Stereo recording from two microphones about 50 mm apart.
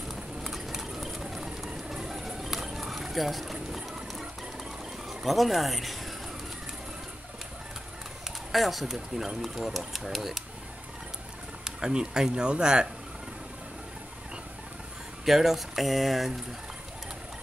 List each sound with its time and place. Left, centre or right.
0.1 s a sound: centre
5.2 s speech: centre
8.5 s speech: centre
11.6 s speech: centre
15.2 s speech: centre